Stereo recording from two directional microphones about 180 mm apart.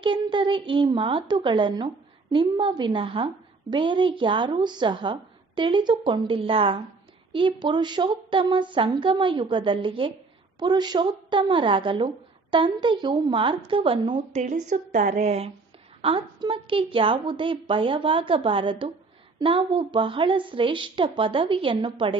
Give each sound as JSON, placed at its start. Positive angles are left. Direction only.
{"t": 0.0, "sound": "a woman's voice", "side_deg": -25}
{"t": 14.4, "sound": "a woman's voice", "side_deg": -45}